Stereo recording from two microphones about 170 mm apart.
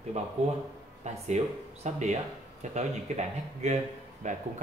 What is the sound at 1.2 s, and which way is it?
A man's voice, 45° right (ahead or behind).